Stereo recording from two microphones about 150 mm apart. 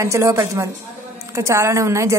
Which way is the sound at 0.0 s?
20° right (ahead or behind).